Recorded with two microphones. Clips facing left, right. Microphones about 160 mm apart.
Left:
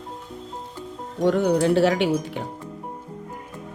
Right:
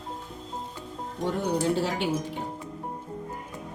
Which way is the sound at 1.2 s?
75° left (ahead or behind).